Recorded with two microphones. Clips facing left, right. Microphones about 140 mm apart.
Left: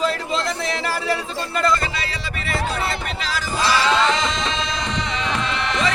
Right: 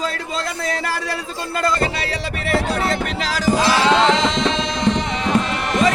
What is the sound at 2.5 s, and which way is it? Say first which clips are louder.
Music: right 5 dB; 80° right.